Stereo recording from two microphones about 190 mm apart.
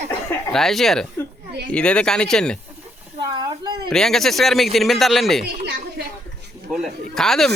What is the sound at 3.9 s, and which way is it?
Speech, centre (ahead or behind).